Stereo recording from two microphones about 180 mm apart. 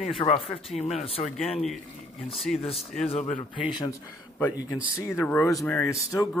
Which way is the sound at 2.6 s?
35° left (ahead or behind).